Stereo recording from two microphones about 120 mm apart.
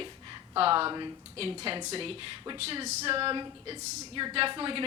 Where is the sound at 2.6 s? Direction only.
55° right (ahead or behind).